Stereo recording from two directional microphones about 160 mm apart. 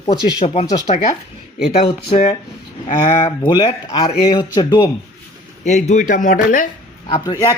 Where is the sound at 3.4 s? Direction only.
25° left (ahead or behind).